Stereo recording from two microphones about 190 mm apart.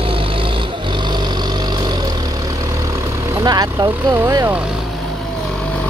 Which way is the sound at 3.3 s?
20° right (ahead or behind).